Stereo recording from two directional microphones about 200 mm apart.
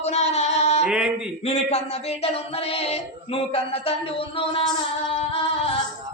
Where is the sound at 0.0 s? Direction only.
35° left (ahead or behind).